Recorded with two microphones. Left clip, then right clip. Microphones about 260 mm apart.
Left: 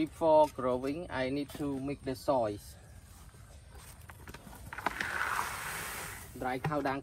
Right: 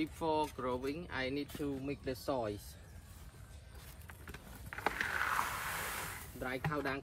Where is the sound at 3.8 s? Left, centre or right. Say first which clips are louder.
Left 2 dB; left.